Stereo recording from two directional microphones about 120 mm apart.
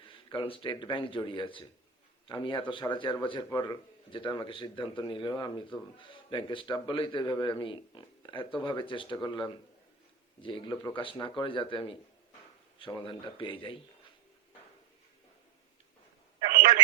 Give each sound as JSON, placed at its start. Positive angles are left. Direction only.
{"t": 0.3, "sound": "a man's voice", "side_deg": 45}